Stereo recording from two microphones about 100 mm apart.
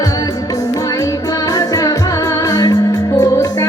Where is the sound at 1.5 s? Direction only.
35° left (ahead or behind).